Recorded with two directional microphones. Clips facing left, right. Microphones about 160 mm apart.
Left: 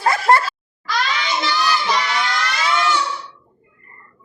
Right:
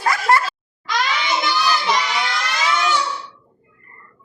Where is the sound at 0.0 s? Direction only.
30° left (ahead or behind).